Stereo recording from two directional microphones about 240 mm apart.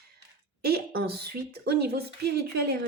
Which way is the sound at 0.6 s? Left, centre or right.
Right.